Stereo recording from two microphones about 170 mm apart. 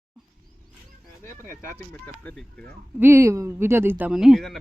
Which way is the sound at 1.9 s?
5° left (ahead or behind).